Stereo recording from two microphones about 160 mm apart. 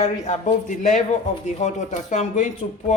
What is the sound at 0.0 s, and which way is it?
Speech, 50° left (ahead or behind).